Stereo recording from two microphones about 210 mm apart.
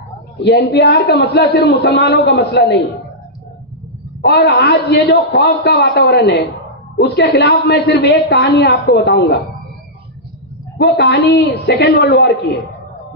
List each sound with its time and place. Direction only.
0.4 s a man's voice: 50° left (ahead or behind)
4.2 s a man's voice: 50° left (ahead or behind)
10.8 s a man's voice: 50° left (ahead or behind)